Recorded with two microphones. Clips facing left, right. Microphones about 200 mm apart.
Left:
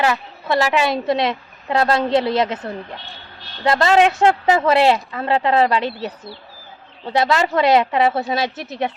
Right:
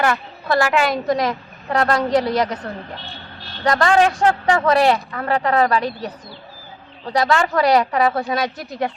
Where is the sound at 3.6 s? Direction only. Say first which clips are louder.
Left 1 dB; 25° left (ahead or behind).